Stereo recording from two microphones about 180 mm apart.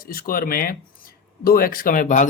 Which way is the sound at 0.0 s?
55° left (ahead or behind).